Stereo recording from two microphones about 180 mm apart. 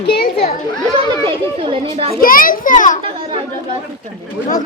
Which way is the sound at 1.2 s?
30° right (ahead or behind).